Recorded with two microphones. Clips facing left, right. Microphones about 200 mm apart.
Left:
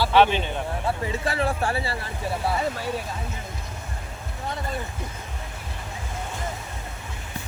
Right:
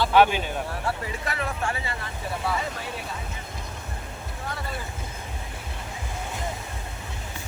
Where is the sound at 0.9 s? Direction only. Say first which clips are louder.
Left 4 dB; 30° left (ahead or behind).